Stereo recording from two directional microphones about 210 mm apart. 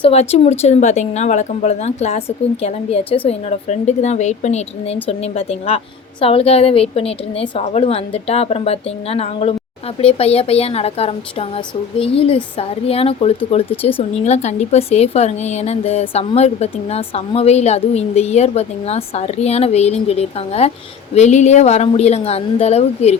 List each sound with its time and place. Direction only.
0.0 s a woman's voice: 30° left (ahead or behind)